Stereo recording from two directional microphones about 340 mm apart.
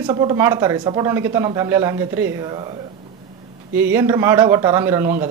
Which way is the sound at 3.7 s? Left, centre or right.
Centre.